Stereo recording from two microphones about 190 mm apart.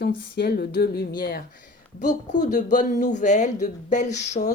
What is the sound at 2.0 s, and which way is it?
Speech, 40° left (ahead or behind).